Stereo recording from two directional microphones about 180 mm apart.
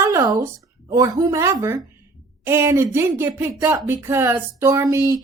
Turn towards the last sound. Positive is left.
turn(degrees=-15)  # may be behind; listen again after turning